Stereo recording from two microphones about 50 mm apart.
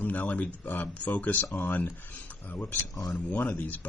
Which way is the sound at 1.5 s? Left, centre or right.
Left.